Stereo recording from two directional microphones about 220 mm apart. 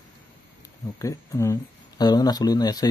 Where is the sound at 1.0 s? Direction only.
15° left (ahead or behind).